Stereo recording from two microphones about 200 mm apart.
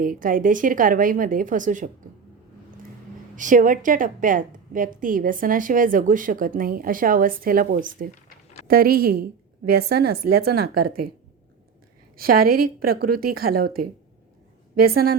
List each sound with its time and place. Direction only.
0.0 s a woman's voice: 45° right (ahead or behind)
3.3 s a woman's voice: 40° right (ahead or behind)
12.1 s a woman's voice: 45° right (ahead or behind)